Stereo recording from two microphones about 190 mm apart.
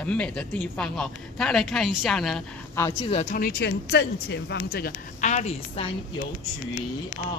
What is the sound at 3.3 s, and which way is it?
Speech, 55° left (ahead or behind).